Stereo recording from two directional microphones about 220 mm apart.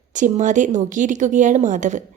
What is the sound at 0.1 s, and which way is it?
Speech, 35° right (ahead or behind).